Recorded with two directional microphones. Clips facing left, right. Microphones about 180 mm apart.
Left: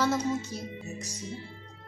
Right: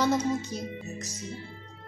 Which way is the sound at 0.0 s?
20° right (ahead or behind).